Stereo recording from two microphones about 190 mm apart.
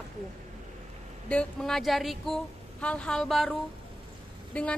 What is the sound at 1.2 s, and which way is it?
A woman's voice, 5° left (ahead or behind).